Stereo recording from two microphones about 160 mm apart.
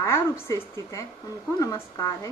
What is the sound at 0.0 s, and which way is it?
A woman's voice, 20° left (ahead or behind).